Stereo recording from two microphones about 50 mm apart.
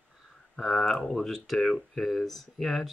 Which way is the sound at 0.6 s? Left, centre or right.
Centre.